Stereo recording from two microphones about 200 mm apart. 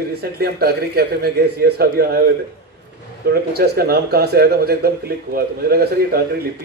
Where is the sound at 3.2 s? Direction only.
55° right (ahead or behind).